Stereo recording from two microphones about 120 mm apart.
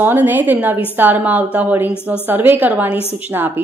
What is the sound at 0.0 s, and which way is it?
A woman's voice, 15° right (ahead or behind).